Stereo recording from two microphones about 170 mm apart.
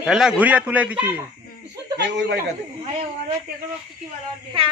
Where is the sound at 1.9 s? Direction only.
85° right.